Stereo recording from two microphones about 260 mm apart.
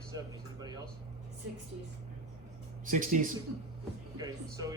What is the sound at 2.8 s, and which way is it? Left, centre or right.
Speech, right.